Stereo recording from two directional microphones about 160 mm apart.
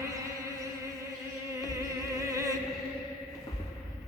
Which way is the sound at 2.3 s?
20° right (ahead or behind).